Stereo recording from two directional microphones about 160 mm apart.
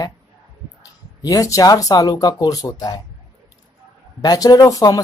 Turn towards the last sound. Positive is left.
turn(degrees=20)  # may be behind; listen again after turning